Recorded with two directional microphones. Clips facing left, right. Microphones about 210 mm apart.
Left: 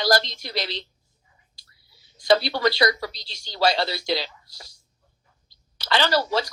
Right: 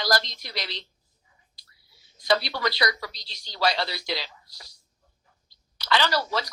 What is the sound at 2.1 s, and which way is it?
A woman's voice, 30° left (ahead or behind).